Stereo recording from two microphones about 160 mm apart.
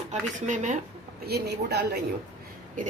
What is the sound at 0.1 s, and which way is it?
Speech, 50° right (ahead or behind).